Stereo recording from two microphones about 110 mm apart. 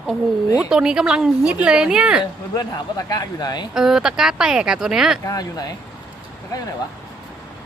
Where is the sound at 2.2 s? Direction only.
35° left (ahead or behind).